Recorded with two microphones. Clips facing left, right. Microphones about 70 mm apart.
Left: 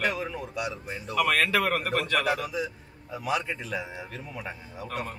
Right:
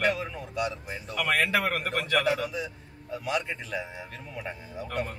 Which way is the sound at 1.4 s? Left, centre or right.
Centre.